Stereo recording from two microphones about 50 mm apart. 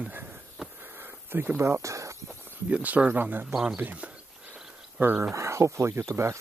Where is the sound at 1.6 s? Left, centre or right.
Right.